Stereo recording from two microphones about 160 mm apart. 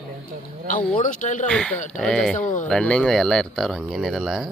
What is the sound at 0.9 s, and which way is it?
Speech, 55° left (ahead or behind).